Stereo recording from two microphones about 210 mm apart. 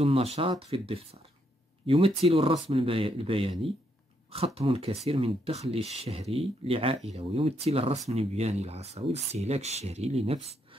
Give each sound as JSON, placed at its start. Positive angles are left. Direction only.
{"t": 0.0, "sound": "speech", "side_deg": -30}